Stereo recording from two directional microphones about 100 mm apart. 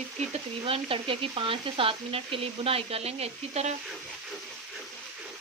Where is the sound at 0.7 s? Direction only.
60° right (ahead or behind); by 3.7 s 90° right.